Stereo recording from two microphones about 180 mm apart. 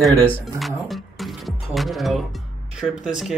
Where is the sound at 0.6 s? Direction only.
Centre (ahead or behind).